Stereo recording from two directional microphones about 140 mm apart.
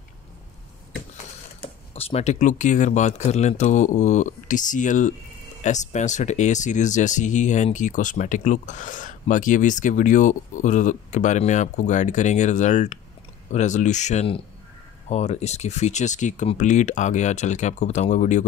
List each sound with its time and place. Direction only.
1.6 s speech: 45° left (ahead or behind)